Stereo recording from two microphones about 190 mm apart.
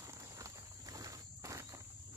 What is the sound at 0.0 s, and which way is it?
Walk, 15° right (ahead or behind).